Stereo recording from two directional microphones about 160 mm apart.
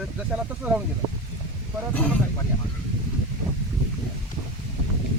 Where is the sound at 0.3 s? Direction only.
10° right (ahead or behind).